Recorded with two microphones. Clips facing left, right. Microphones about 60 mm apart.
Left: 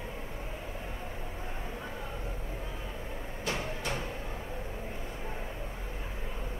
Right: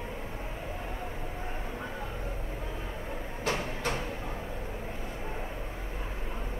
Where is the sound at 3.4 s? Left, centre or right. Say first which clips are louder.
Right 3 dB; right.